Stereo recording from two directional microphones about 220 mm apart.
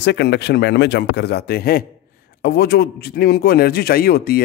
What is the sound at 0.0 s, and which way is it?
A man's voice, 50° left (ahead or behind).